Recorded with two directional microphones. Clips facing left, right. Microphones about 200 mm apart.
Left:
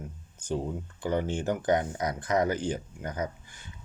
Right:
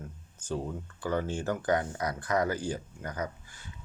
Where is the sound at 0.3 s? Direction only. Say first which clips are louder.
Left 3 dB; 15° left (ahead or behind).